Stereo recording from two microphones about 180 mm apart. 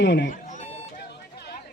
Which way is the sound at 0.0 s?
75° left (ahead or behind).